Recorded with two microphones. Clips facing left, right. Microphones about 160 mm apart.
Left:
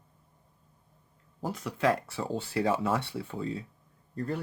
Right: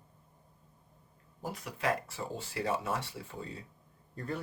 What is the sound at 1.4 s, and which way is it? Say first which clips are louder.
Speech: left 6 dB; 75° left (ahead or behind).